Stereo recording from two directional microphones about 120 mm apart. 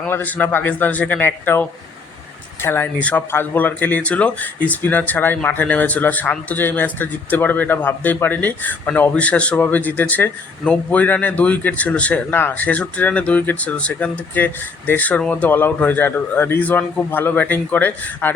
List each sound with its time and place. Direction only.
0.0 s speech: 15° left (ahead or behind)